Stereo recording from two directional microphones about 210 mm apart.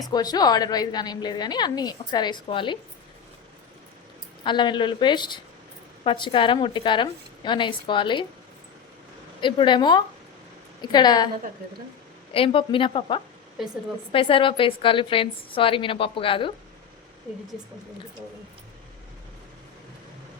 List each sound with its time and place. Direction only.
0.1 s a woman's voice: 20° left (ahead or behind)
4.4 s a woman's voice: 20° left (ahead or behind)
9.4 s a woman's voice: 20° left (ahead or behind)
12.3 s a woman's voice: 25° left (ahead or behind)